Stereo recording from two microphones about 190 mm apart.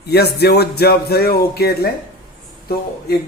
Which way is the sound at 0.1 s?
60° left (ahead or behind).